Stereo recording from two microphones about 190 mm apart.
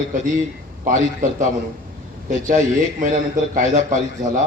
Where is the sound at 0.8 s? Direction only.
45° right (ahead or behind).